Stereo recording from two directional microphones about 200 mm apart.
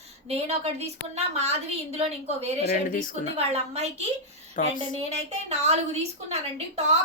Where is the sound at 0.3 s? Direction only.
30° right (ahead or behind).